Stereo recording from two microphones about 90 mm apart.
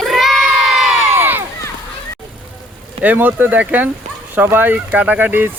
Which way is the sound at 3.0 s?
20° right (ahead or behind).